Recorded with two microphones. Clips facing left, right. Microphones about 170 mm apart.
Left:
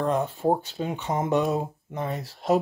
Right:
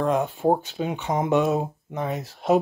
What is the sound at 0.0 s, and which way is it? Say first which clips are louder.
Speech: right 2 dB; 10° right (ahead or behind).